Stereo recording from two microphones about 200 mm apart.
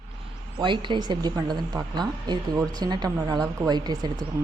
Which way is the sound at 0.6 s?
25° right (ahead or behind).